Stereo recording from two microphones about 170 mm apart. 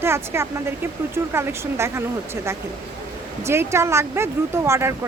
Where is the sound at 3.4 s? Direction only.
15° right (ahead or behind).